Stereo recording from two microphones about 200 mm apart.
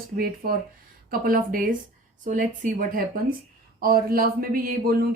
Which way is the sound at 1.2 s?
45° right (ahead or behind).